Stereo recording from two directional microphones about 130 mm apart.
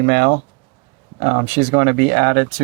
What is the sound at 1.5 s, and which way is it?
Speech, 25° right (ahead or behind).